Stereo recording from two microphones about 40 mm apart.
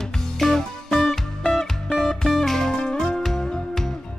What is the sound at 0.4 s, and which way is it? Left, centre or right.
Music, centre.